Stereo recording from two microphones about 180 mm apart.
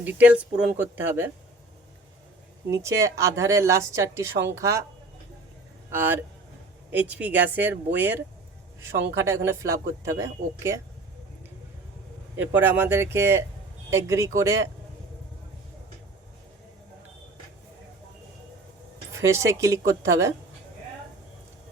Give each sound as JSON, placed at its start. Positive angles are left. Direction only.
{"t": 0.0, "sound": "speech", "side_deg": -10}
{"t": 2.6, "sound": "speech", "side_deg": -15}
{"t": 5.9, "sound": "speech", "side_deg": -10}
{"t": 12.4, "sound": "speech", "side_deg": -10}
{"t": 19.1, "sound": "speech", "side_deg": -15}